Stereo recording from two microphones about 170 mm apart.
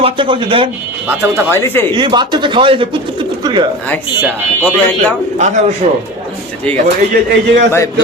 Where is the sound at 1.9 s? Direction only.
25° right (ahead or behind).